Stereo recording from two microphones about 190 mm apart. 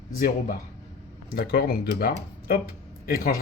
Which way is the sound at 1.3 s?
55° left (ahead or behind).